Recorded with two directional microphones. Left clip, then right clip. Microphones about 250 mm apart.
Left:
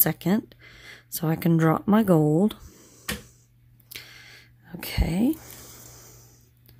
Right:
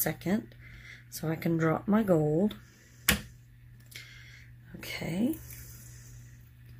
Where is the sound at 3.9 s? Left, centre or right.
Left.